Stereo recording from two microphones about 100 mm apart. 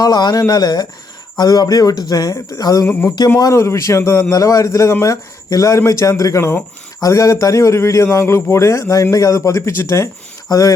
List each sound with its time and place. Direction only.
0.0 s a man's voice: 45° left (ahead or behind)